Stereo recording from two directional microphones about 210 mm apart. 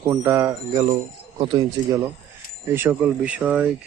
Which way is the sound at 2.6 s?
10° right (ahead or behind).